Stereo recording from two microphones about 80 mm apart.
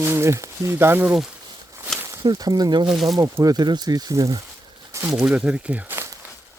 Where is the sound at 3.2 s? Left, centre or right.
Right.